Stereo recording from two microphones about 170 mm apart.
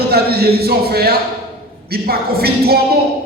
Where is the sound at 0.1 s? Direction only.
65° right (ahead or behind).